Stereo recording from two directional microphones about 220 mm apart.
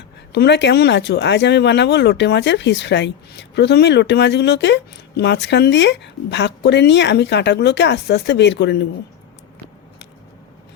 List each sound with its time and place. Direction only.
0.3 s speech: 50° left (ahead or behind)